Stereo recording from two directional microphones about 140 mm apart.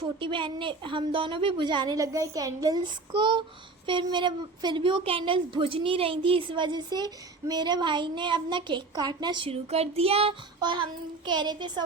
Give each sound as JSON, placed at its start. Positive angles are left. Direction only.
{"t": 0.0, "sound": "a woman's voice", "side_deg": -35}
{"t": 9.5, "sound": "child singing", "side_deg": -50}
{"t": 10.6, "sound": "child singing", "side_deg": -35}
{"t": 11.3, "sound": "a woman's voice", "side_deg": -30}